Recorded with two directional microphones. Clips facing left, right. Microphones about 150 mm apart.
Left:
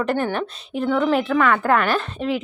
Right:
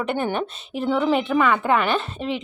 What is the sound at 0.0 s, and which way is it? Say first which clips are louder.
A woman's voice: left 2 dB; 5° right (ahead or behind).